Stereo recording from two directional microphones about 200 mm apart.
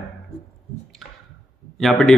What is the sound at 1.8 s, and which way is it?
Speech, centre (ahead or behind).